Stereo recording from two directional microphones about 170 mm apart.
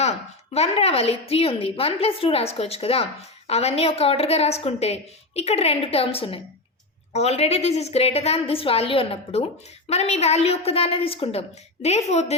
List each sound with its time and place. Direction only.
0.5 s a woman's voice: 35° left (ahead or behind)